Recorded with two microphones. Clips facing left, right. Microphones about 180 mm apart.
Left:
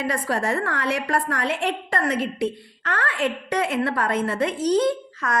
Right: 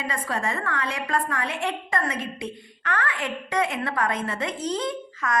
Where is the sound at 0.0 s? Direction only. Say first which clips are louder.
Left 4 dB; 70° left (ahead or behind).